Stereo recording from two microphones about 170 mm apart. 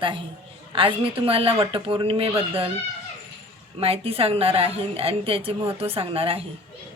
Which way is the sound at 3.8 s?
35° right (ahead or behind).